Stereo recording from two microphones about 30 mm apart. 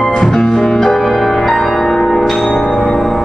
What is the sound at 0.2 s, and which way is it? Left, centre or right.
Music, centre.